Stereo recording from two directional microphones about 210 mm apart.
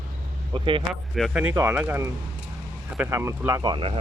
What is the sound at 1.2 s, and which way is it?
Speech, 5° right (ahead or behind).